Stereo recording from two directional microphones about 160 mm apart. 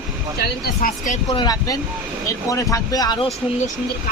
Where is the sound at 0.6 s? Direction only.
65° left (ahead or behind).